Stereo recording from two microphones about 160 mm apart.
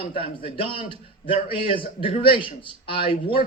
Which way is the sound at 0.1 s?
35° left (ahead or behind).